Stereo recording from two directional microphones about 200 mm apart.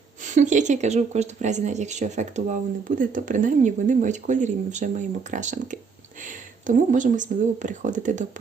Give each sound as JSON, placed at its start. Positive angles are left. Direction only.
{"t": 0.3, "sound": "speech", "side_deg": -35}